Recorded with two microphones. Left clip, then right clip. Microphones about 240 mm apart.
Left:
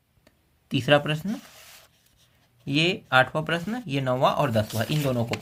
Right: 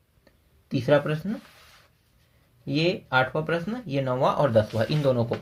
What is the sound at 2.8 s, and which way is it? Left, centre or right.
Speech, left.